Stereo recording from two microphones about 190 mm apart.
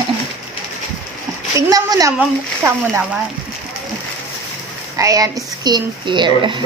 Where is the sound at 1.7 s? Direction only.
20° right (ahead or behind).